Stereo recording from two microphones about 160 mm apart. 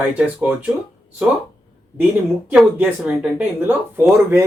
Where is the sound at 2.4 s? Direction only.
10° right (ahead or behind).